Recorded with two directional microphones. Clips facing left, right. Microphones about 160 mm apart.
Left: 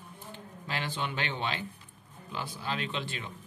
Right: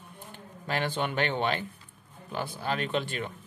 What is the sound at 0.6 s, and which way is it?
Speech, 55° right (ahead or behind).